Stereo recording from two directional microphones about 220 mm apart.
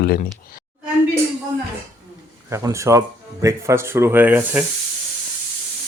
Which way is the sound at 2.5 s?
15° right (ahead or behind).